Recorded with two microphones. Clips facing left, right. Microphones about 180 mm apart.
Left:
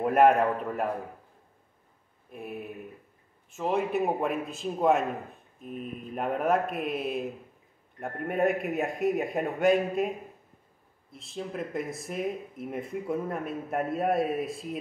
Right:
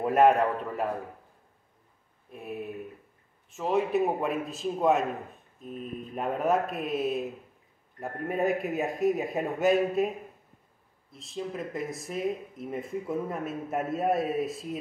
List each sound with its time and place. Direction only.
0.0 s speech: centre (ahead or behind)
3.5 s speech: centre (ahead or behind)
11.1 s speech: centre (ahead or behind)